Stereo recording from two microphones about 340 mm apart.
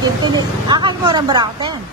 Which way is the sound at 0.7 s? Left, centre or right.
Centre.